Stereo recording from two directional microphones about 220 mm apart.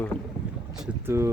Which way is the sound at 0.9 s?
10° right (ahead or behind).